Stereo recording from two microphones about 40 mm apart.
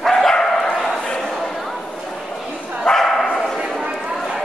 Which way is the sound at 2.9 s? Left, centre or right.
Centre.